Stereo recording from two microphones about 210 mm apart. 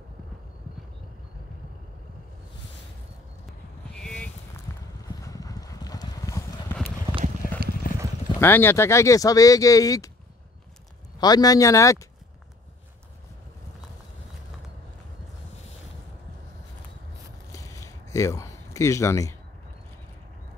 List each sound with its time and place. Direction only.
3.9 s a sound: 5° left (ahead or behind)
4.7 s clip-clop: 10° left (ahead or behind)
7.8 s clip-clop: 40° left (ahead or behind)
8.4 s speech: 10° left (ahead or behind)
11.1 s speech: 20° left (ahead or behind)
17.5 s a sound: 15° left (ahead or behind)